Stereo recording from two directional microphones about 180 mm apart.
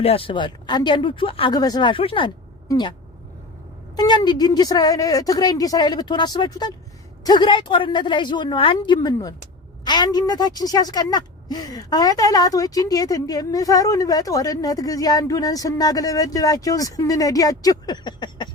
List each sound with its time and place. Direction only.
0.0 s a woman's voice: 30° left (ahead or behind)
3.9 s a woman's voice: 20° left (ahead or behind)